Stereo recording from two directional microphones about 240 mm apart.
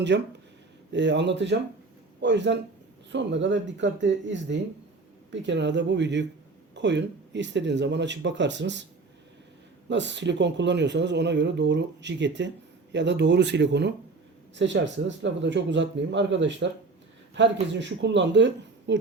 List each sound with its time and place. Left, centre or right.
0.1 s speech: right
9.9 s speech: right